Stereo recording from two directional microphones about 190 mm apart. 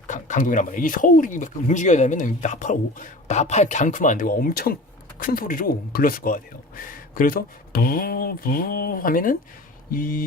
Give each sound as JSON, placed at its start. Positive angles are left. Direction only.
{"t": 0.1, "sound": "speech", "side_deg": 45}